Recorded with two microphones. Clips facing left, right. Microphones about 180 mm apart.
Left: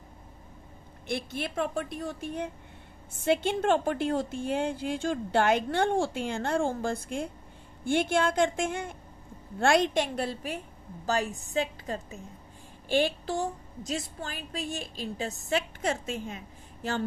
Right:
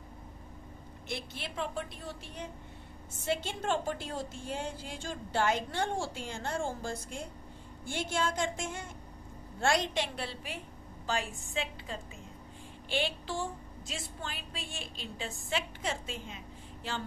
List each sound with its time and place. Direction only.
1.1 s a woman's voice: 50° left (ahead or behind)